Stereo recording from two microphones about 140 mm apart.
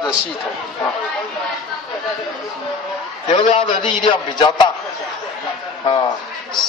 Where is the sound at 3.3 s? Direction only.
35° left (ahead or behind).